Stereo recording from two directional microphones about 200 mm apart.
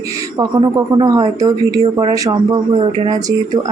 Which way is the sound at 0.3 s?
20° right (ahead or behind).